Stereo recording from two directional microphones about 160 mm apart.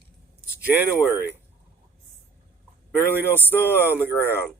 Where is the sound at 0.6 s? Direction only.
10° right (ahead or behind).